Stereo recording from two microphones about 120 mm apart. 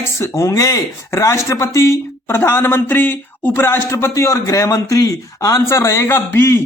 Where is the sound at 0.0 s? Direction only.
20° left (ahead or behind).